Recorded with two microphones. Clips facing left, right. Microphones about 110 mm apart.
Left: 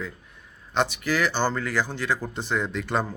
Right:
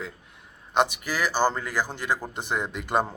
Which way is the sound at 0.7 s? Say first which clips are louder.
Even; 15° right (ahead or behind).